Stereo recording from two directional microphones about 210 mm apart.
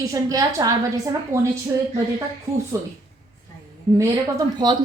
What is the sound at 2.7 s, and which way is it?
Speech, 15° right (ahead or behind).